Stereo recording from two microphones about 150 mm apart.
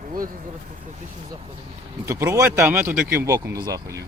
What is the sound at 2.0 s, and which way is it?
Speech, 20° right (ahead or behind).